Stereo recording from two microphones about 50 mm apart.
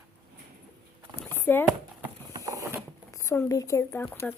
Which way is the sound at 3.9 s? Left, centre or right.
Left.